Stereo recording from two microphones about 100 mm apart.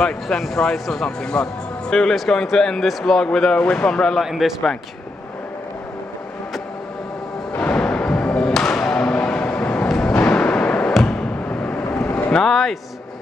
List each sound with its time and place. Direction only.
0.0 s speech: 5° left (ahead or behind)
7.5 s music: 15° left (ahead or behind)
10.0 s fireworks: 15° left (ahead or behind)
10.9 s a sound: 5° left (ahead or behind)
11.4 s vehicle: 15° left (ahead or behind)
12.3 s speech: 5° left (ahead or behind)